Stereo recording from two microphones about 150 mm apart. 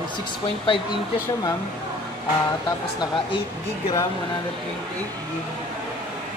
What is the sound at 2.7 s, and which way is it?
Speech, 35° left (ahead or behind).